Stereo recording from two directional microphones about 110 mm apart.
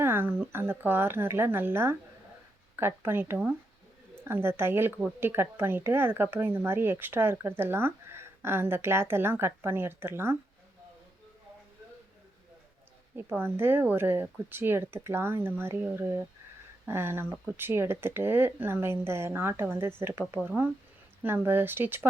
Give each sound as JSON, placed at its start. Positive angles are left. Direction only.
{"t": 0.0, "sound": "speech", "side_deg": -20}
{"t": 13.1, "sound": "speech", "side_deg": -20}